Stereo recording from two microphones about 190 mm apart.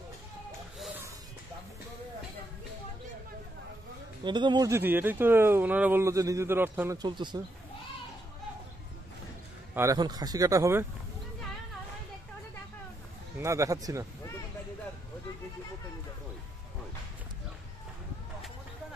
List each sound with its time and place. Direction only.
0.7 s a sound: 10° right (ahead or behind)
4.2 s speech: 25° right (ahead or behind)
7.0 s speech: 25° right (ahead or behind)
9.8 s speech: 20° right (ahead or behind)
13.4 s speech: 15° right (ahead or behind)